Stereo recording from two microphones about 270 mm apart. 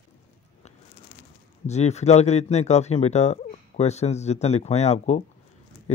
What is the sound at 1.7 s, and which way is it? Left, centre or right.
Speech, left.